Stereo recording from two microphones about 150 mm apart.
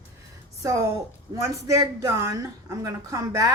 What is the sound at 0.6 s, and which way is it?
A woman's voice, 20° right (ahead or behind).